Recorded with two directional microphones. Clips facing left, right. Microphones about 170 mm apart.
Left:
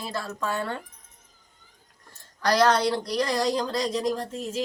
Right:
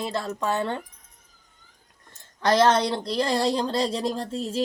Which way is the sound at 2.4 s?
25° right (ahead or behind).